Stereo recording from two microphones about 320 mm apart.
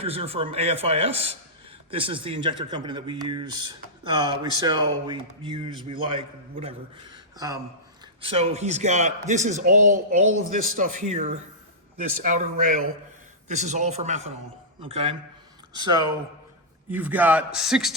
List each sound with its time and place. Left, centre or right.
0.0 s a man's voice: centre